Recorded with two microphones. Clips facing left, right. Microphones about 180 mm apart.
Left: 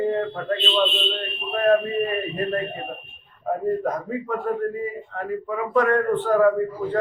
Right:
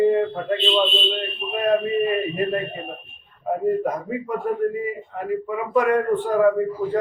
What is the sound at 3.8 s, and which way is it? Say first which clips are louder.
Speech: even; 10° right (ahead or behind).